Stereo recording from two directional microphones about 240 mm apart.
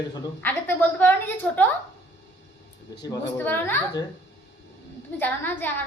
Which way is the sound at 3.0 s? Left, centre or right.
Centre.